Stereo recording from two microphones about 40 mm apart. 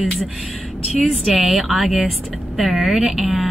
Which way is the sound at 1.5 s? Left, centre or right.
Centre.